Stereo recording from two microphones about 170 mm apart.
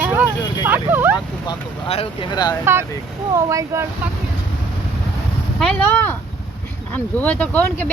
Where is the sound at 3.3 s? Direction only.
15° right (ahead or behind).